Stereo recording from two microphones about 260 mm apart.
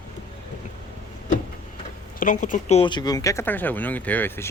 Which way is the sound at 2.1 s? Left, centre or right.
Left.